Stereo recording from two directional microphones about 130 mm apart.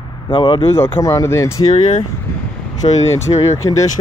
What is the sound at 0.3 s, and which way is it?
Speech, 50° left (ahead or behind).